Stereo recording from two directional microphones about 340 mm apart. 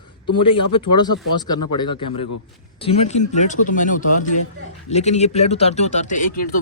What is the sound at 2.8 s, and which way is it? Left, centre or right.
Speech, centre.